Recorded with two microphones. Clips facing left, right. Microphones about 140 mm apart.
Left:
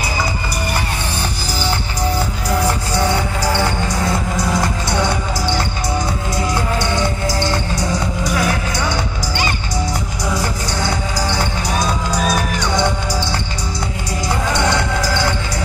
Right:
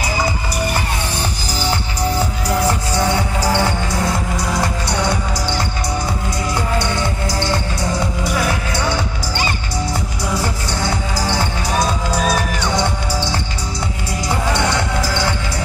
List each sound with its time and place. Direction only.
12.1 s music: centre (ahead or behind)